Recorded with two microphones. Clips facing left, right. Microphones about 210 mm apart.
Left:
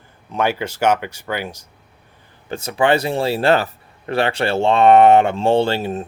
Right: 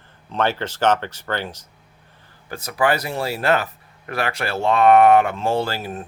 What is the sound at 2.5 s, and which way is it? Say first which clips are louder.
Speech: left 4 dB; 25° left (ahead or behind).